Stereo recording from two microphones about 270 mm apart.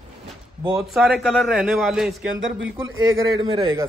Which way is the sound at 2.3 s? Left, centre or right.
Right.